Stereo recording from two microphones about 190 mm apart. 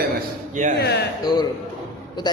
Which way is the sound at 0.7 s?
60° left (ahead or behind).